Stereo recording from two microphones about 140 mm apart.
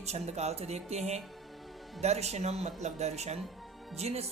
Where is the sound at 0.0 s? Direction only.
50° right (ahead or behind).